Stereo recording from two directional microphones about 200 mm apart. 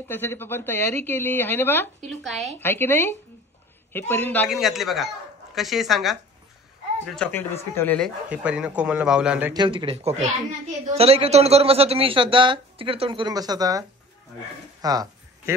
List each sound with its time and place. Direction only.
0.1 s a woman's voice: 10° left (ahead or behind)
2.6 s a woman's voice: 10° left (ahead or behind)
4.5 s a woman's voice: centre (ahead or behind)
8.3 s a man's voice: 5° right (ahead or behind)
9.5 s speech: 20° right (ahead or behind)
14.8 s a sound: 20° right (ahead or behind)